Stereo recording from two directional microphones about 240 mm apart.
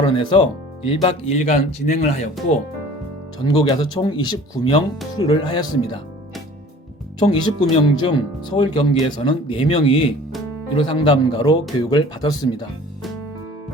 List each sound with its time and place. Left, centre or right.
0.0 s speech: centre
3.4 s speech: centre
7.2 s speech: centre